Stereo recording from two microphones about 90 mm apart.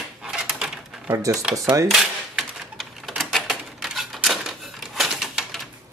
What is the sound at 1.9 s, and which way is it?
Typewriter, centre (ahead or behind).